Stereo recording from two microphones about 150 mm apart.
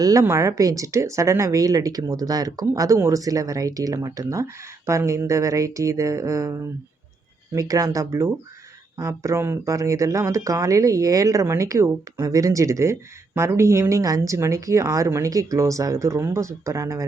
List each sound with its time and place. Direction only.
0.0 s speech: 20° right (ahead or behind)